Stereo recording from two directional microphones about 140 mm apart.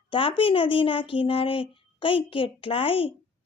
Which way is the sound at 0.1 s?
40° left (ahead or behind).